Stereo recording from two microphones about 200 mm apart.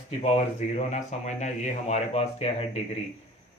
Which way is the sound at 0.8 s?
35° left (ahead or behind).